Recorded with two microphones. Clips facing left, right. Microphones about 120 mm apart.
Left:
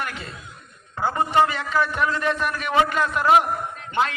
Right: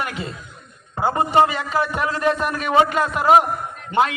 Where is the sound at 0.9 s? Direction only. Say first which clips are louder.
Right 3 dB; 20° right (ahead or behind).